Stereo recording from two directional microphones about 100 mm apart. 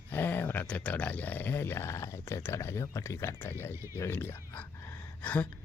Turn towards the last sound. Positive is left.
turn(degrees=15)  # may be behind; listen again after turning